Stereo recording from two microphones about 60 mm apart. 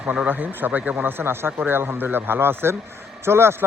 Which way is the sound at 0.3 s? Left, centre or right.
Right.